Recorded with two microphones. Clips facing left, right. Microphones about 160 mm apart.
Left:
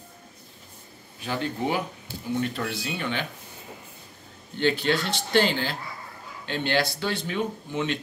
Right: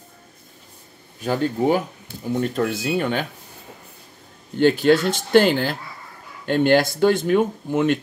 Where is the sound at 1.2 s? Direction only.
40° right (ahead or behind).